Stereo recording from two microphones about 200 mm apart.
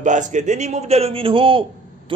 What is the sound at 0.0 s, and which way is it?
A man's voice, 40° right (ahead or behind).